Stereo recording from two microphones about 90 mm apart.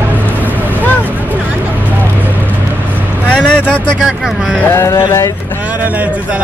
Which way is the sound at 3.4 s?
10° right (ahead or behind).